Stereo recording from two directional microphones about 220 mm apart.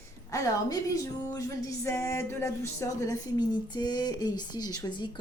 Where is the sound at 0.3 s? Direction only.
15° left (ahead or behind).